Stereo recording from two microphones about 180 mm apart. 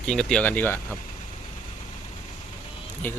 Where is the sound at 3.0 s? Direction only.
10° left (ahead or behind).